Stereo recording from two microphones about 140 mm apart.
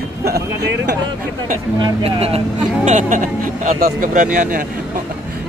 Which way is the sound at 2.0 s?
45° right (ahead or behind).